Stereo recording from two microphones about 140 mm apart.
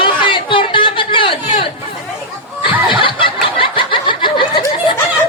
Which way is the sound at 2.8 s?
35° left (ahead or behind).